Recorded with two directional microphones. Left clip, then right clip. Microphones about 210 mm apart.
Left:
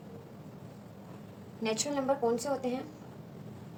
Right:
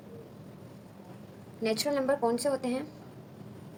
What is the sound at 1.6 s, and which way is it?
A woman's voice, 35° right (ahead or behind).